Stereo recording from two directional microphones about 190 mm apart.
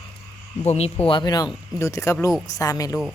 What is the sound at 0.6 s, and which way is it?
Speech, 35° left (ahead or behind).